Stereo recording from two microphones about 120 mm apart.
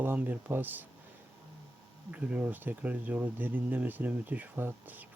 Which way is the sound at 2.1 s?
10° right (ahead or behind).